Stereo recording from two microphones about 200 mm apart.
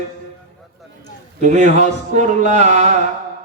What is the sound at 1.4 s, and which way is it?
A man's voice, 35° right (ahead or behind).